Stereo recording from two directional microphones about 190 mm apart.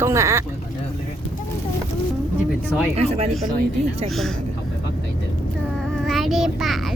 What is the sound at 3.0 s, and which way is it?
Speech, 30° right (ahead or behind).